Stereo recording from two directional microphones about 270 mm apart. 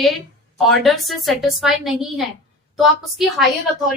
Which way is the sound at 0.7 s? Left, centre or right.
Centre.